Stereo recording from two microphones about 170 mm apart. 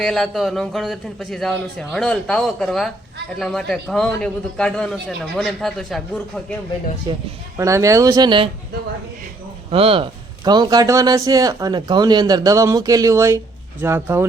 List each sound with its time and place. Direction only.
0.0 s a man's voice: centre (ahead or behind)
7.1 s speech: 25° right (ahead or behind)
9.6 s speech: 35° right (ahead or behind); by 14.3 s 15° right (ahead or behind)